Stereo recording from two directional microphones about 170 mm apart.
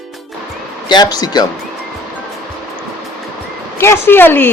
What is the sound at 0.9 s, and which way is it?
Speech, 25° left (ahead or behind).